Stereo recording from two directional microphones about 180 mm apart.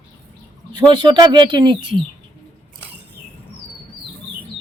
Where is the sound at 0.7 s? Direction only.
25° right (ahead or behind).